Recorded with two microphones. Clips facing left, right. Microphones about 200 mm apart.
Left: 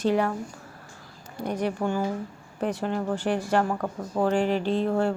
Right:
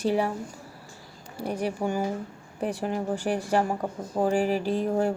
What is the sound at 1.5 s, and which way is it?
Speech, 10° right (ahead or behind).